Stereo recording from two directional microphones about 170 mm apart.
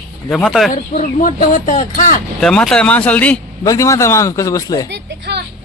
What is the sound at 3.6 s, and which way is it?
A man's voice, 20° left (ahead or behind).